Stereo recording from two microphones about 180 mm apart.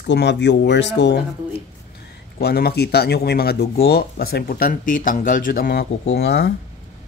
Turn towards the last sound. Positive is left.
turn(degrees=65)  # may be behind; listen again after turning